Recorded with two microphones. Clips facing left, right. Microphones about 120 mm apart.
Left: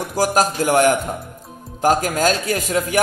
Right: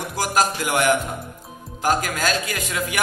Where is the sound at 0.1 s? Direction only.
40° left (ahead or behind).